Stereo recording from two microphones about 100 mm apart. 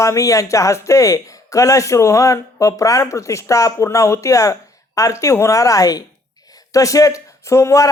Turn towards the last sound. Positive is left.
turn(degrees=30)  # may be behind; listen again after turning